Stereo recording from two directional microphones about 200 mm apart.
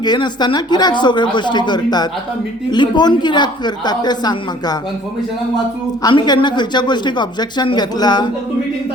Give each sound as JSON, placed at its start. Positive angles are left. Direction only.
{"t": 0.0, "sound": "speech", "side_deg": 20}
{"t": 6.0, "sound": "speech", "side_deg": 20}